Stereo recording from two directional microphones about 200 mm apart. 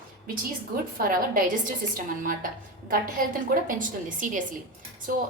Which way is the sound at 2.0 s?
40° right (ahead or behind).